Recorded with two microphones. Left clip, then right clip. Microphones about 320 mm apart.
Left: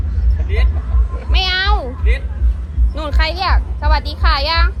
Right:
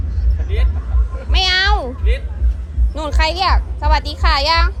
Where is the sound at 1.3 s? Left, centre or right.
Right.